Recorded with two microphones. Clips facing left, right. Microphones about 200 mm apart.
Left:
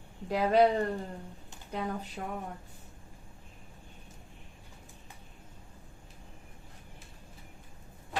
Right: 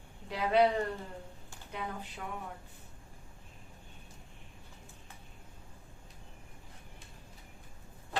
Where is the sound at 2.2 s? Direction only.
40° left (ahead or behind).